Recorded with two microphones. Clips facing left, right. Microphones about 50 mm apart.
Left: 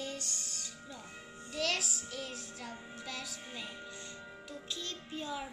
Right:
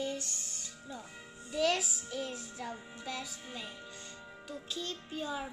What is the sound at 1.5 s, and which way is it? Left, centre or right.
Music, centre.